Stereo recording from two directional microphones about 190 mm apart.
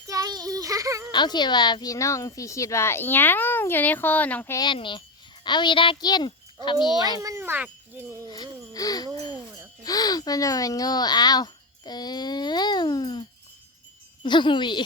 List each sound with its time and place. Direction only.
0.1 s child singing: 20° right (ahead or behind)
1.1 s a woman's voice: 25° left (ahead or behind)
4.6 s a child's voice: 25° left (ahead or behind)
7.2 s wind chime: 15° right (ahead or behind)
8.3 s a sound: 20° left (ahead or behind)
9.8 s speech: 20° left (ahead or behind)
14.3 s a child's voice: 25° left (ahead or behind)